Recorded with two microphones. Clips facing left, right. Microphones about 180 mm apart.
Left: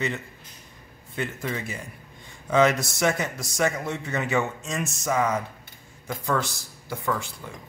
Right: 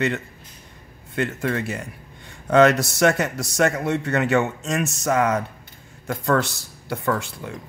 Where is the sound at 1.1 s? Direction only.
70° right (ahead or behind).